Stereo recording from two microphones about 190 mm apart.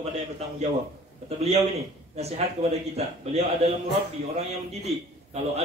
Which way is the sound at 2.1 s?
35° right (ahead or behind).